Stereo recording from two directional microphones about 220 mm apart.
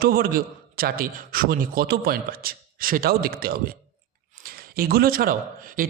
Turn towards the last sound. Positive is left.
turn(degrees=-40)  # may be behind; listen again after turning